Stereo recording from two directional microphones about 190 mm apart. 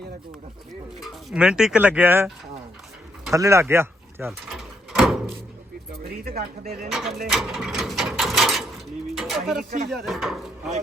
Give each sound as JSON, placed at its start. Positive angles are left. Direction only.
{"t": 0.9, "sound": "speech", "side_deg": -5}
{"t": 3.3, "sound": "speech", "side_deg": -15}
{"t": 4.3, "sound": "door", "side_deg": 0}
{"t": 6.1, "sound": "speech", "side_deg": -55}
{"t": 6.9, "sound": "speech", "side_deg": 0}
{"t": 7.3, "sound": "mechanisms", "side_deg": 0}
{"t": 9.1, "sound": "dishes", "side_deg": 0}
{"t": 9.9, "sound": "speech", "side_deg": 0}